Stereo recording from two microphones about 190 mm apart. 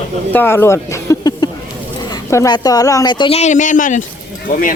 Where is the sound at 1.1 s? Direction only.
15° left (ahead or behind).